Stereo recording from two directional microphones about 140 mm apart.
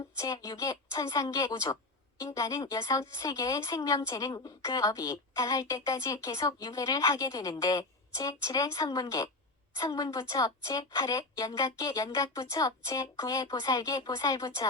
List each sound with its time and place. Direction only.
0.2 s a woman's voice: 25° left (ahead or behind)